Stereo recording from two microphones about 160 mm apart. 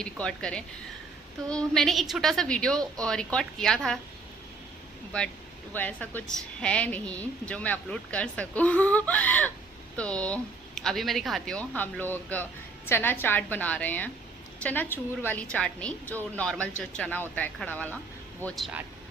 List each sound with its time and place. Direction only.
0.0 s a woman's voice: 5° left (ahead or behind)
5.7 s a woman's voice: 10° left (ahead or behind)